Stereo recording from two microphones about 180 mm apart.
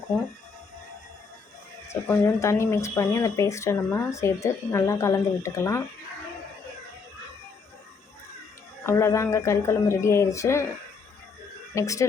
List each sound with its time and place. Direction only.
1.9 s speech: 15° left (ahead or behind)
8.9 s speech: 15° left (ahead or behind)
11.7 s speech: 15° left (ahead or behind)